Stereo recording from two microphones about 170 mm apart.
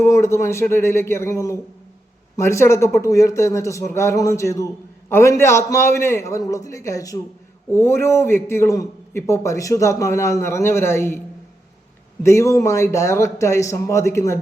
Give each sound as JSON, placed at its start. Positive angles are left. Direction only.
{"t": 0.0, "sound": "speech", "side_deg": 15}
{"t": 12.2, "sound": "speech", "side_deg": 15}